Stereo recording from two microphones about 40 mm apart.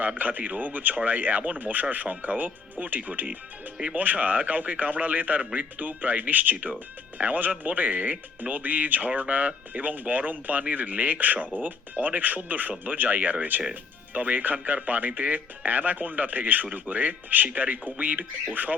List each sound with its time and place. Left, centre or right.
0.2 s speech: right